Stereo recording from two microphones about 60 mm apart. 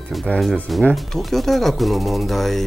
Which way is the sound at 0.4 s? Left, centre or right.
Centre.